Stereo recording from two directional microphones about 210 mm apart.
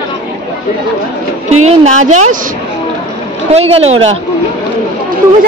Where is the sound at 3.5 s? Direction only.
30° right (ahead or behind).